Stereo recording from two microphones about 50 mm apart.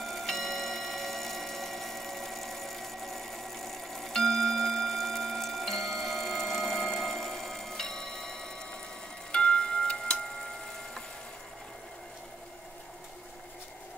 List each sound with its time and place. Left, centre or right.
0.0 s clock: centre
6.9 s tick-tock: centre
9.3 s tubular bells: centre